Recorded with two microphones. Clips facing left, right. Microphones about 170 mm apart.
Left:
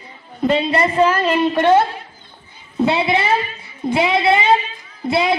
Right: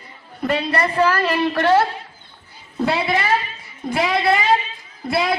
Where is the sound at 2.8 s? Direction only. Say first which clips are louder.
Left 3 dB; 25° left (ahead or behind).